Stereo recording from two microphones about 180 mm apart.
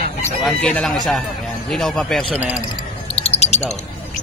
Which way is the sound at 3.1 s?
35° left (ahead or behind).